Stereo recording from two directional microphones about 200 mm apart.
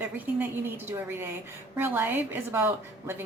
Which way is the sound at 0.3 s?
10° right (ahead or behind).